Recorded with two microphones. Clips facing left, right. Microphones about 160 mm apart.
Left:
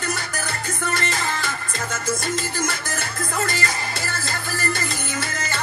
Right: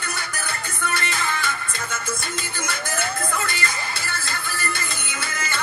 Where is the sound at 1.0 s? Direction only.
40° left (ahead or behind).